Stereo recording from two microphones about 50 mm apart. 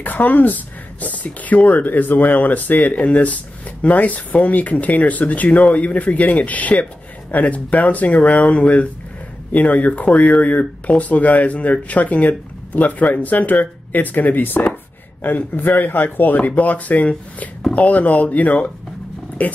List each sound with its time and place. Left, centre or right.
0.0 s speech: left